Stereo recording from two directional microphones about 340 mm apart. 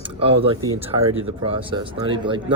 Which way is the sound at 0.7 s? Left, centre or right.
Right.